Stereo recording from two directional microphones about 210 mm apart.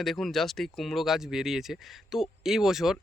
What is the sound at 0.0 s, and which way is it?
Speech, centre (ahead or behind).